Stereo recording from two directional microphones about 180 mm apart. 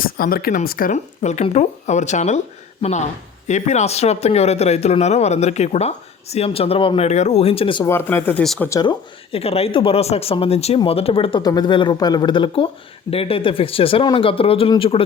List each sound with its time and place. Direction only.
0.0 s speech: 55° left (ahead or behind); by 7.9 s 30° left (ahead or behind)
7.9 s speech: 15° left (ahead or behind)
8.8 s speech: 30° left (ahead or behind)